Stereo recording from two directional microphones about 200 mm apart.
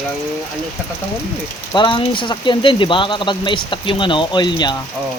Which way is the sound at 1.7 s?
25° left (ahead or behind).